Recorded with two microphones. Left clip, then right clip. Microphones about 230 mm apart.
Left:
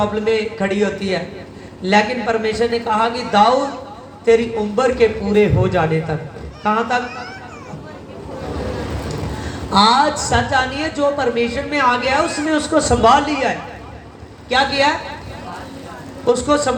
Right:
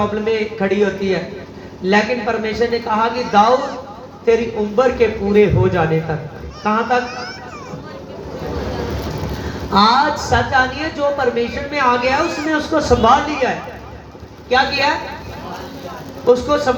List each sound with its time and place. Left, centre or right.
0.0 s a woman's voice: left
9.7 s a woman's voice: left
14.5 s a woman's voice: left
16.2 s a woman's voice: left